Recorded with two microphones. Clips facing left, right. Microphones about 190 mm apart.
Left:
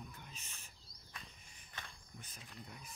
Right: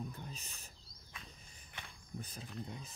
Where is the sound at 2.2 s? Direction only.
30° right (ahead or behind).